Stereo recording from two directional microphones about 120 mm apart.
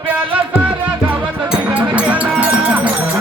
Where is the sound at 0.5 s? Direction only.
10° right (ahead or behind).